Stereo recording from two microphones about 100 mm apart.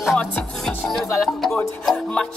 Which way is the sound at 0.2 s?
5° left (ahead or behind).